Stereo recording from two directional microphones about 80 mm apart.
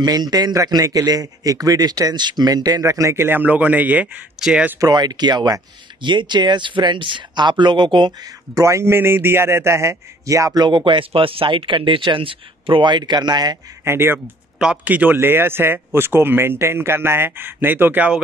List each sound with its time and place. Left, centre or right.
0.0 s speech: right
2.8 s speech: right; by 4.2 s centre
4.4 s speech: centre
4.7 s speech: right
8.3 s a man's voice: right
10.6 s speech: right
13.8 s speech: right